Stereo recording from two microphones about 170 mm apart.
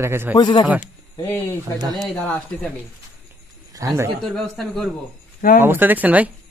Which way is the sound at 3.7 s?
20° right (ahead or behind).